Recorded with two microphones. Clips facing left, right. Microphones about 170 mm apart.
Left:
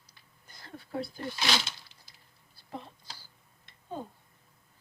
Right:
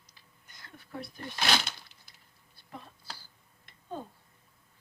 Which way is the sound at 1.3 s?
55° right (ahead or behind).